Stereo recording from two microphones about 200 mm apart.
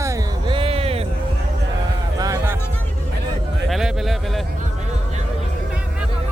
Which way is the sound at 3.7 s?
Centre (ahead or behind).